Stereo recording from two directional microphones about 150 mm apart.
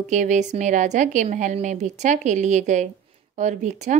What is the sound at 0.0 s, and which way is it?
Speech, 55° right (ahead or behind).